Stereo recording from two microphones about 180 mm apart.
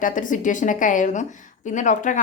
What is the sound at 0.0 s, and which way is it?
A woman's voice, 45° left (ahead or behind).